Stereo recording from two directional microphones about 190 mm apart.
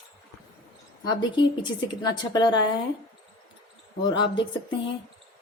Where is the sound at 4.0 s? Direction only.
25° left (ahead or behind).